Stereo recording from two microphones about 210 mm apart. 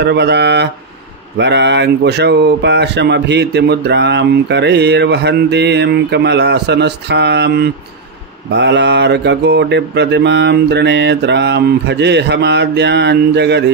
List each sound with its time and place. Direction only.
0.0 s speech: 55° right (ahead or behind)
8.5 s mantra: 55° right (ahead or behind)